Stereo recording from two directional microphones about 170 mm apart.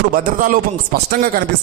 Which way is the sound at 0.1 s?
55° right (ahead or behind).